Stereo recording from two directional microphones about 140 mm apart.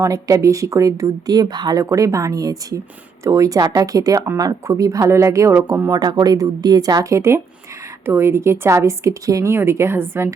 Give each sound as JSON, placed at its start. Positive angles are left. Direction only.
{"t": 0.0, "sound": "speech", "side_deg": -25}
{"t": 5.9, "sound": "speech", "side_deg": -30}